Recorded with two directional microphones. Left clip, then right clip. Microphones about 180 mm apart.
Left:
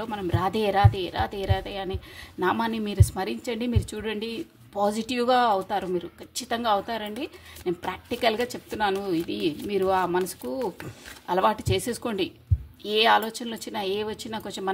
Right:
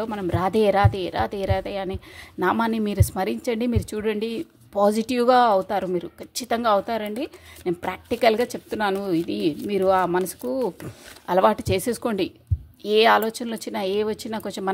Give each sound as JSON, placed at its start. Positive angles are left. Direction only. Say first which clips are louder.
{"t": 0.0, "sound": "speech", "louder": "right 3 dB", "side_deg": -40}